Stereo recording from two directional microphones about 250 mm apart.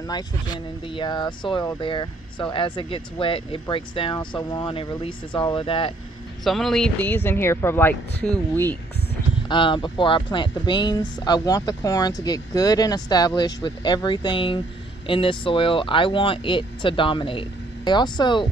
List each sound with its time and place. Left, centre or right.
0.0 s speech: centre
6.4 s speech: centre
9.5 s speech: centre